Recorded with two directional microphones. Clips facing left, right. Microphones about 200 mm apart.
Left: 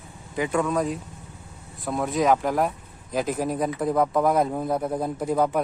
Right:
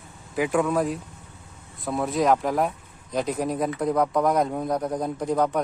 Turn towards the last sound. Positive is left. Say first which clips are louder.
# even
turn(degrees=5)  # may be behind; listen again after turning